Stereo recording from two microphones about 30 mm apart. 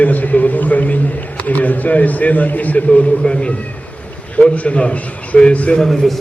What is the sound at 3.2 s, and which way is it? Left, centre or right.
A man's voice, left.